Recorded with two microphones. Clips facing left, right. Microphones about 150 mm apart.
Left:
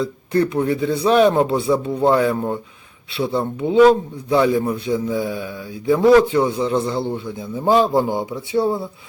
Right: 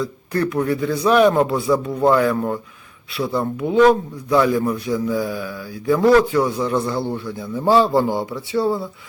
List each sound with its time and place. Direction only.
0.0 s speech: 25° left (ahead or behind)